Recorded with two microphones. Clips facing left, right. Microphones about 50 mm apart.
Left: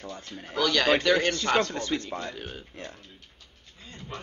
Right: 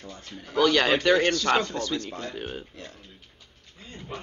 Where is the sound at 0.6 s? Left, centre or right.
Right.